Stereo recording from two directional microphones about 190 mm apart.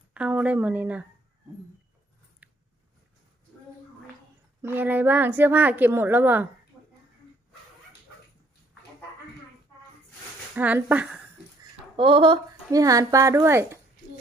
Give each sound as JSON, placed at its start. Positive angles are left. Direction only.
{"t": 0.1, "sound": "speech", "side_deg": -5}
{"t": 2.4, "sound": "a sound", "side_deg": -10}
{"t": 4.6, "sound": "speech", "side_deg": -10}
{"t": 10.5, "sound": "speech", "side_deg": -10}
{"t": 11.9, "sound": "speech", "side_deg": -25}